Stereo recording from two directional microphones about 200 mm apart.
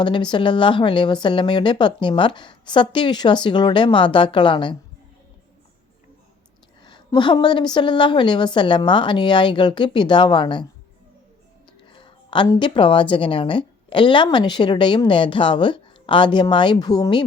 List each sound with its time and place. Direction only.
0.0 s a woman's voice: 25° left (ahead or behind)
6.8 s a woman's voice: 20° left (ahead or behind)
11.9 s a woman's voice: 25° left (ahead or behind)